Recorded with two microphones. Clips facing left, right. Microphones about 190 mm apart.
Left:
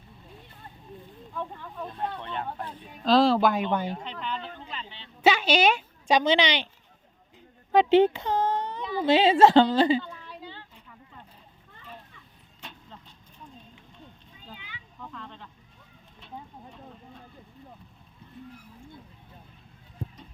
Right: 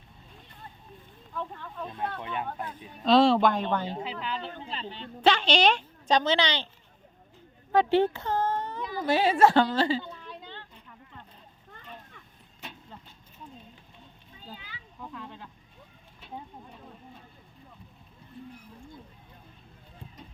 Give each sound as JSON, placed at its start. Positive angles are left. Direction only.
{"t": 1.3, "sound": "speech", "side_deg": 10}
{"t": 2.1, "sound": "speech", "side_deg": -10}
{"t": 4.0, "sound": "speech", "side_deg": -5}
{"t": 4.7, "sound": "speech", "side_deg": -40}
{"t": 5.2, "sound": "a woman's voice", "side_deg": 5}
{"t": 7.7, "sound": "a woman's voice", "side_deg": 15}
{"t": 10.1, "sound": "a sound", "side_deg": 5}
{"t": 14.5, "sound": "a sound", "side_deg": -35}
{"t": 15.0, "sound": "a sound", "side_deg": -10}